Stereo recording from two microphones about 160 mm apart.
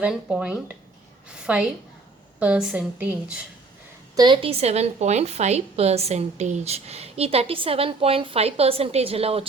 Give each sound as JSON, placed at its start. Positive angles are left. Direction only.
{"t": 0.0, "sound": "a woman's voice", "side_deg": -5}
{"t": 4.1, "sound": "a woman's voice", "side_deg": -25}